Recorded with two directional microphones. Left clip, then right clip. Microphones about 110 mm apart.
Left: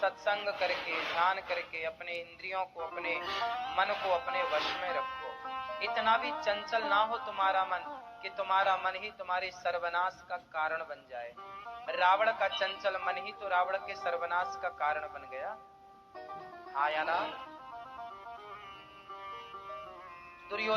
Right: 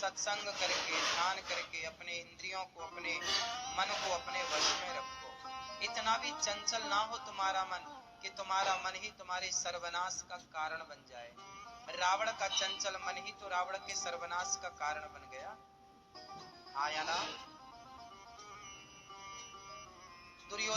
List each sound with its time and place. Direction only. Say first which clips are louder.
0.0 s speech: left 6 dB; 35° left (ahead or behind)
16.3 s music: left 5 dB; 35° left (ahead or behind)
20.5 s speech: left 5 dB; 35° left (ahead or behind)